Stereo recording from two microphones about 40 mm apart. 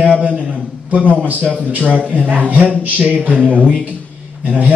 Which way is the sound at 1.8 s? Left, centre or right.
Left.